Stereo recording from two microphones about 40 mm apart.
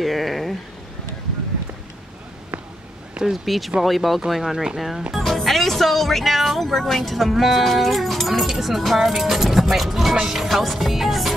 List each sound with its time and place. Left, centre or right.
0.0 s speech: centre
3.3 s speech: centre